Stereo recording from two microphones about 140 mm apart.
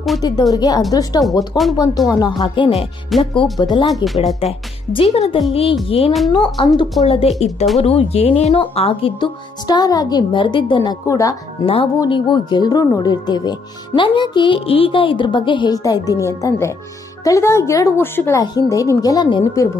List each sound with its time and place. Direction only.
0.2 s a woman's voice: 25° left (ahead or behind)
3.1 s speech: centre (ahead or behind)
3.5 s a woman's voice: 30° left (ahead or behind)
3.9 s speech: centre (ahead or behind)
4.9 s speech: 45° left (ahead or behind)
6.3 s speech: 30° left (ahead or behind)
7.1 s speech: 50° left (ahead or behind)
9.7 s a woman's voice: 30° left (ahead or behind)
11.6 s a woman's voice: 40° left (ahead or behind); by 18.4 s 15° left (ahead or behind)
18.4 s a woman's voice: 25° left (ahead or behind)